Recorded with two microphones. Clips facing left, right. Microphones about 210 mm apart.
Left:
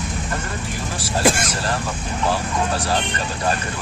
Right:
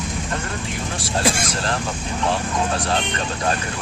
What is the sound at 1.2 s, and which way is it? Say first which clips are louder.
Speech: left 4 dB; centre (ahead or behind).